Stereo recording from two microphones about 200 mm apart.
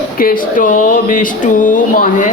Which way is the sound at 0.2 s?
45° left (ahead or behind).